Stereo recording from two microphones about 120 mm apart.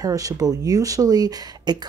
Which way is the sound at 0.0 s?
30° right (ahead or behind).